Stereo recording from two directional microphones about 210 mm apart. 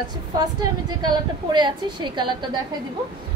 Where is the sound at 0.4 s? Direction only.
20° right (ahead or behind).